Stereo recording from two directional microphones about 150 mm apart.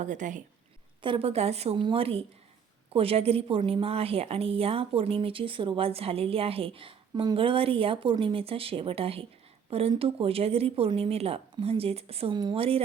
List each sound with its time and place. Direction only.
0.0 s a woman's voice: 55° right (ahead or behind)
1.0 s a woman's voice: 40° right (ahead or behind)